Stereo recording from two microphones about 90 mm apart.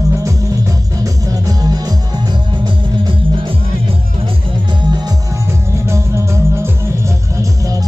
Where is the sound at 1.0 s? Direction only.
40° right (ahead or behind); by 3.5 s 60° right (ahead or behind).